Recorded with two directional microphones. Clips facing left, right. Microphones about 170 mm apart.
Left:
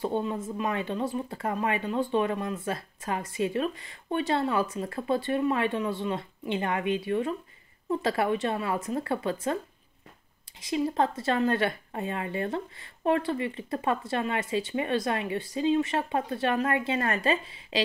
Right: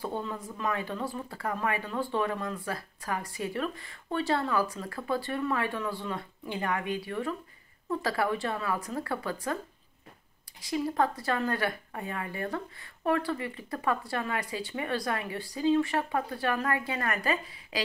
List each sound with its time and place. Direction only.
0.0 s speech: 20° left (ahead or behind)
10.6 s speech: 20° left (ahead or behind)